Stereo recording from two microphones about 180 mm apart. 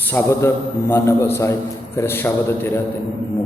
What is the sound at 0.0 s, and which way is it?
A man's voice, 10° left (ahead or behind).